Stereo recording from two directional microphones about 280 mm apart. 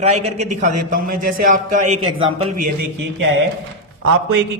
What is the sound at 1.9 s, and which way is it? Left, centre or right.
Speech, right.